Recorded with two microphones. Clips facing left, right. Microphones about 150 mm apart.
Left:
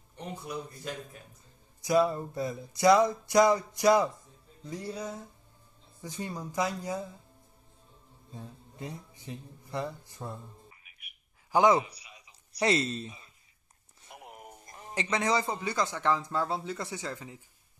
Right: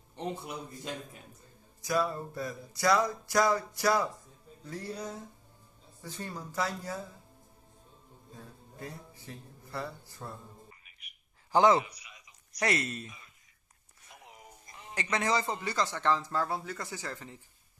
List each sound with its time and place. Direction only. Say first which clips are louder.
1.8 s music: left 5 dB; 20° left (ahead or behind)
4.6 s a man's voice: left 2 dB; 15° left (ahead or behind)
8.4 s speech: left 3 dB; 20° left (ahead or behind)
11.0 s a sound: left 1 dB; 10° left (ahead or behind)
11.8 s a sound: left 1 dB; 30° left (ahead or behind)
14.1 s music: left 5 dB; 60° left (ahead or behind)
15.0 s a man's voice: left 2 dB; 20° left (ahead or behind)